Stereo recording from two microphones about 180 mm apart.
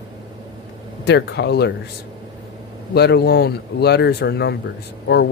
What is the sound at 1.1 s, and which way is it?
Speech, 70° left (ahead or behind).